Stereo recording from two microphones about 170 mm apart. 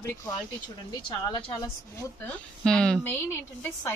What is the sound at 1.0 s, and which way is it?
Speech, 25° left (ahead or behind).